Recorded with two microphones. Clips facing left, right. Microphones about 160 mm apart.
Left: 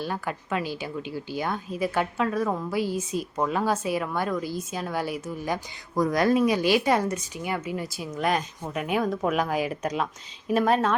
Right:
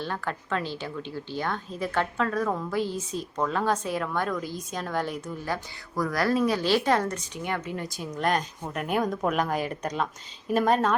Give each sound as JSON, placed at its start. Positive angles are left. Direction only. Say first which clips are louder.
{"t": 0.0, "sound": "speech", "louder": "left 1 dB", "side_deg": 10}
{"t": 6.0, "sound": "speech", "louder": "left 3 dB", "side_deg": 20}